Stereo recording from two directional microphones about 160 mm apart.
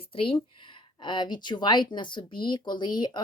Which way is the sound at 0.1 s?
35° left (ahead or behind).